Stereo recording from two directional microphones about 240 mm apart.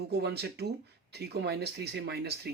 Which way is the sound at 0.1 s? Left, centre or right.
Right.